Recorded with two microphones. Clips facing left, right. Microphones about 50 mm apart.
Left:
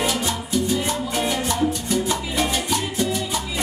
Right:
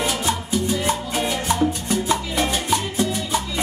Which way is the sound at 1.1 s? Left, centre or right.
Centre.